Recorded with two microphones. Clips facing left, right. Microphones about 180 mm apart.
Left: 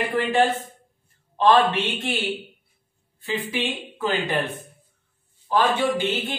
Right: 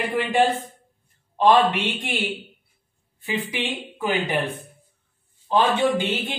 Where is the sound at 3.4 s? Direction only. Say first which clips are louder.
Left 1 dB; 15° right (ahead or behind).